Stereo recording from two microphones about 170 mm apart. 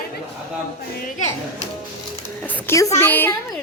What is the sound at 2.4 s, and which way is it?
Speech, 15° left (ahead or behind).